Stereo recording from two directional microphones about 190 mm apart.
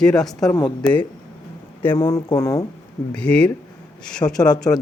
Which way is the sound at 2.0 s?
20° left (ahead or behind).